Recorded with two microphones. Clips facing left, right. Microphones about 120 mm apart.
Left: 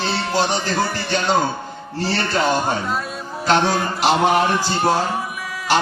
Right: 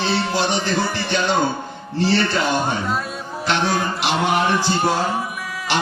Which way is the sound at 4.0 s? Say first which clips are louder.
Left 6 dB; 45° left (ahead or behind).